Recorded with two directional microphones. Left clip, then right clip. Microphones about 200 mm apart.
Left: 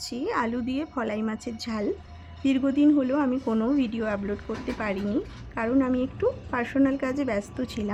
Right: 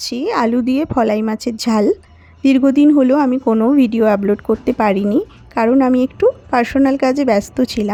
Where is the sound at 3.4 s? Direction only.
25° right (ahead or behind).